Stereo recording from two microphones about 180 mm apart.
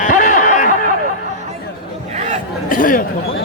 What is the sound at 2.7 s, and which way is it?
Chatter, 50° left (ahead or behind).